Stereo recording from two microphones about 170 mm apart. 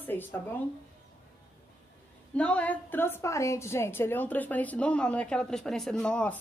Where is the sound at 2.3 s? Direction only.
5° left (ahead or behind).